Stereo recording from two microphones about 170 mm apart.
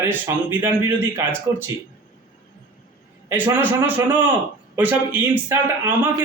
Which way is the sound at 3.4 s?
10° right (ahead or behind).